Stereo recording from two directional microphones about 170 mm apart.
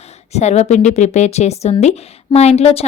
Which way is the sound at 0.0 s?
40° left (ahead or behind).